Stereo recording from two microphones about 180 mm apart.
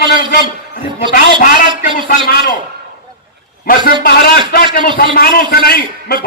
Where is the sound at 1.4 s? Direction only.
50° left (ahead or behind).